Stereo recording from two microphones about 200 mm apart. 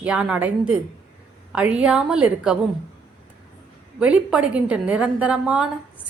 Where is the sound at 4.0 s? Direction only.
5° right (ahead or behind).